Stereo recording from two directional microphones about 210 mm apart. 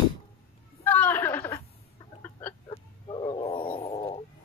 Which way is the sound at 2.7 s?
25° left (ahead or behind).